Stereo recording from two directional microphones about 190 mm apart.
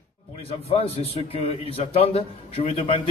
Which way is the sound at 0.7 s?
30° left (ahead or behind).